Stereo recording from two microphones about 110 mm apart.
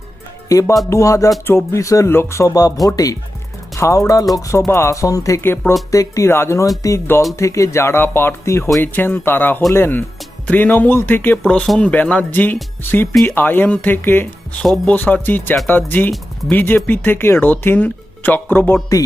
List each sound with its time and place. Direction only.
0.4 s music: 30° left (ahead or behind)
0.9 s speech: 30° left (ahead or behind)
11.4 s speech: 5° left (ahead or behind)